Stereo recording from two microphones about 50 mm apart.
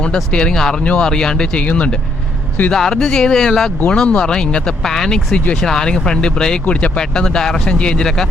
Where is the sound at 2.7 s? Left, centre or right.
Centre.